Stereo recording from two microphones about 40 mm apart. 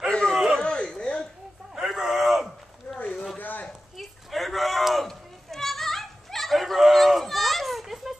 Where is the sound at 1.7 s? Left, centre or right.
Centre.